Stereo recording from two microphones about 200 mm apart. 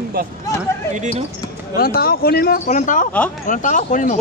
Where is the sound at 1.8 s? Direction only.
50° left (ahead or behind).